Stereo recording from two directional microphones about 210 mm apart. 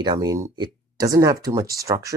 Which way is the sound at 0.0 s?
20° right (ahead or behind).